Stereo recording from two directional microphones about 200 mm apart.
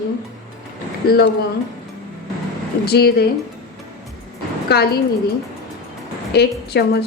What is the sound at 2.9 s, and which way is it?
Speech, 55° left (ahead or behind).